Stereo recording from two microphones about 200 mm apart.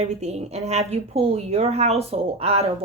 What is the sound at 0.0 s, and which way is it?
A woman's voice, 30° right (ahead or behind).